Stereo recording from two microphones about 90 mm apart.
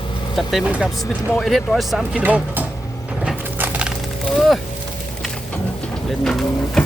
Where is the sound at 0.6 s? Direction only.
10° right (ahead or behind).